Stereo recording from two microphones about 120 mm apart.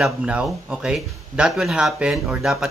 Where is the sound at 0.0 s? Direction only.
5° right (ahead or behind).